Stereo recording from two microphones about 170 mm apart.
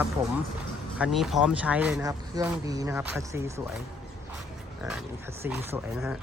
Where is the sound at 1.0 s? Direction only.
Centre (ahead or behind).